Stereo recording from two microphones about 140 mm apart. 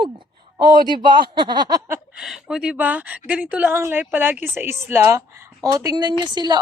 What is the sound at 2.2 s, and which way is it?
A woman's voice, 5° right (ahead or behind).